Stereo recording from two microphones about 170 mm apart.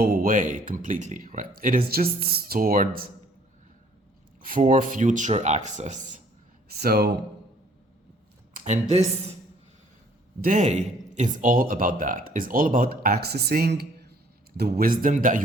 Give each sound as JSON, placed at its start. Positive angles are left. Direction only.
{"t": 0.0, "sound": "speech", "side_deg": -55}
{"t": 4.6, "sound": "speech", "side_deg": -50}
{"t": 6.7, "sound": "speech", "side_deg": -65}
{"t": 8.5, "sound": "speech", "side_deg": -45}
{"t": 10.4, "sound": "speech", "side_deg": -50}